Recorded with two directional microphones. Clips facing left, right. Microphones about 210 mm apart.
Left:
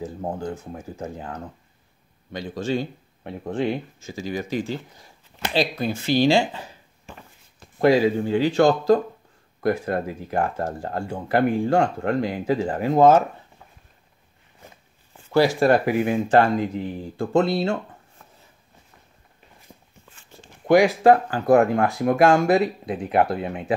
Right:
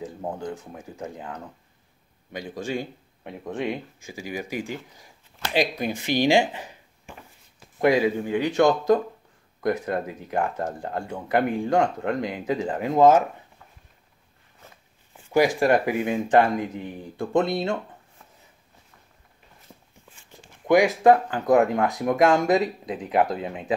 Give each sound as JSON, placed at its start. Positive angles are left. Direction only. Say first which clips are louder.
{"t": 0.0, "sound": "speech", "louder": "left 3 dB", "side_deg": -15}
{"t": 2.3, "sound": "speech", "louder": "left 4 dB", "side_deg": -15}
{"t": 12.9, "sound": "speech", "louder": "left 1 dB", "side_deg": 30}
{"t": 14.6, "sound": "a sound", "louder": "left 3 dB", "side_deg": 15}
{"t": 15.2, "sound": "speech", "louder": "left 2 dB", "side_deg": -15}
{"t": 20.1, "sound": "speech", "louder": "left 2 dB", "side_deg": -15}